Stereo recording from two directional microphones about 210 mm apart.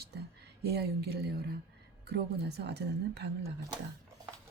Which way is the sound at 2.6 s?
55° right (ahead or behind).